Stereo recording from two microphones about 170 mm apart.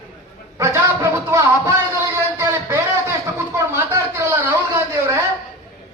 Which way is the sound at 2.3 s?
15° right (ahead or behind).